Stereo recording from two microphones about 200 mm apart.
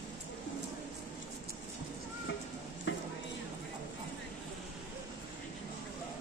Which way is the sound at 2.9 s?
70° left (ahead or behind).